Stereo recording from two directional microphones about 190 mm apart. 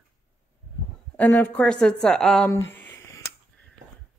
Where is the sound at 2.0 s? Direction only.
5° left (ahead or behind).